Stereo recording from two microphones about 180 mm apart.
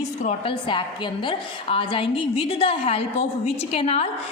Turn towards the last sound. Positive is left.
turn(degrees=30)  # may be behind; listen again after turning